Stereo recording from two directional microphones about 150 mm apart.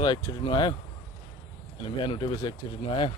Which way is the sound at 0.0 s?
30° left (ahead or behind).